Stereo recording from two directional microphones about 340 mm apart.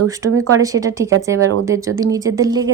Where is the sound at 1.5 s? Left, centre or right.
Right.